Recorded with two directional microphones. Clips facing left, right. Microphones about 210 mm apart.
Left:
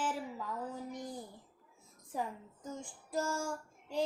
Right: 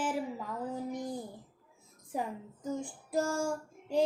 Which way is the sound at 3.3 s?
10° right (ahead or behind).